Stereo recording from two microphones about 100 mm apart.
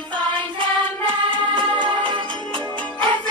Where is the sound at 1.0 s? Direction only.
55° right (ahead or behind).